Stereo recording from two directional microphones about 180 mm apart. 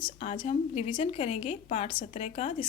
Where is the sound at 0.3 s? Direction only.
35° left (ahead or behind).